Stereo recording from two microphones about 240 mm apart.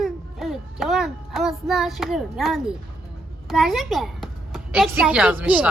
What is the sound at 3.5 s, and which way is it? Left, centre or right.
A woman's voice, centre.